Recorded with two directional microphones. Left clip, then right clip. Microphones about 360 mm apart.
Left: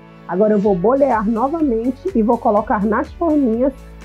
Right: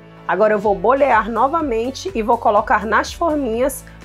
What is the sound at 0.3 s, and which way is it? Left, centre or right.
Speech, centre.